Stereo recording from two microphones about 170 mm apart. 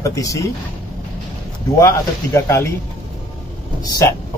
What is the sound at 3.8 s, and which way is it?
Speech, 20° left (ahead or behind).